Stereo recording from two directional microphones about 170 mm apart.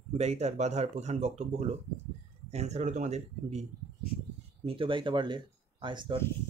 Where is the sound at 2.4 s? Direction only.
40° right (ahead or behind).